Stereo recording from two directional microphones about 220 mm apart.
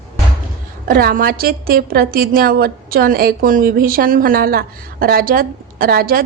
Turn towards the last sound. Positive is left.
turn(degrees=-40)  # may be behind; listen again after turning